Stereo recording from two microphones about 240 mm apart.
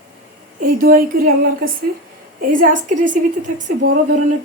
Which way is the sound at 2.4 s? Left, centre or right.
Right.